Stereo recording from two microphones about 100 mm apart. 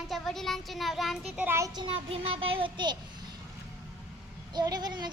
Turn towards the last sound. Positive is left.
turn(degrees=-45)  # may be behind; listen again after turning